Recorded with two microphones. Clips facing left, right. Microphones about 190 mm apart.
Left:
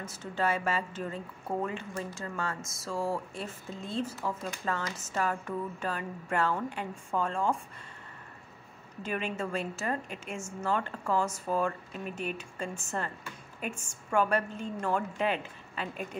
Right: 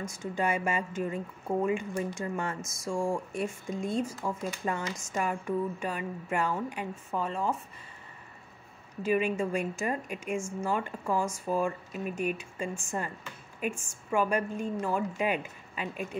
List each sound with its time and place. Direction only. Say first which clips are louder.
0.2 s a woman's voice: even; 15° right (ahead or behind)
2.6 s speech: right 4 dB; centre (ahead or behind)
3.4 s a woman's voice: right 7 dB; 15° right (ahead or behind)
9.0 s a woman's voice: right 6 dB; 10° right (ahead or behind)